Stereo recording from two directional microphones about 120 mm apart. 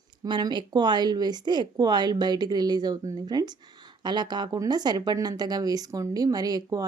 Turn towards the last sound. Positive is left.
turn(degrees=-30)  # may be behind; listen again after turning